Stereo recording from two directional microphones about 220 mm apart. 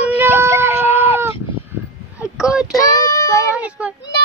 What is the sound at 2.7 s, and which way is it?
Child singing, 15° left (ahead or behind).